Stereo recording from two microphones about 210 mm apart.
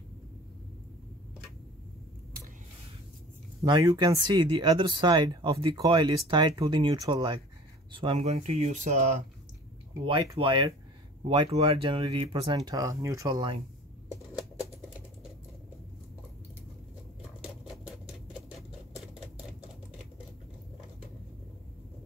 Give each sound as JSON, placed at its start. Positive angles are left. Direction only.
{"t": 3.6, "sound": "speech", "side_deg": -20}
{"t": 10.0, "sound": "speech", "side_deg": -25}
{"t": 17.4, "sound": "patter", "side_deg": -5}